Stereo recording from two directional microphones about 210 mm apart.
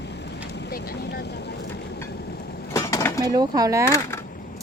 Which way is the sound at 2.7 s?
15° left (ahead or behind).